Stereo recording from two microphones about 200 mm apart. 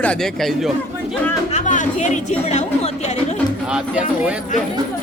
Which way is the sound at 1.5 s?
40° left (ahead or behind).